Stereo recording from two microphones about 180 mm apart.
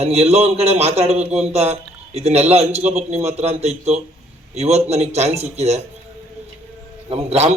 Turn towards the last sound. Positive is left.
turn(degrees=-35)  # may be behind; listen again after turning